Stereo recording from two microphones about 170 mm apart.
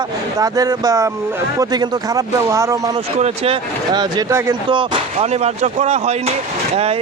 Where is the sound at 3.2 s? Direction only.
35° right (ahead or behind); by 4.5 s 15° right (ahead or behind).